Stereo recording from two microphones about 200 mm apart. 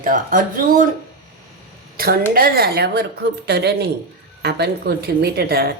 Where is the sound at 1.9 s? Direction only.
50° right (ahead or behind).